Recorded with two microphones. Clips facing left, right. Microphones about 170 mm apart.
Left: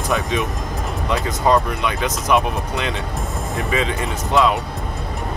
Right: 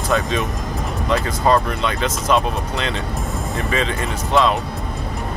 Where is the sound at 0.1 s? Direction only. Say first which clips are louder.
Right 1 dB; 15° left (ahead or behind).